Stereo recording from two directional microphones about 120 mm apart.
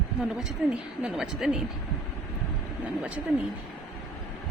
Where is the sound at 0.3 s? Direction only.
5° right (ahead or behind).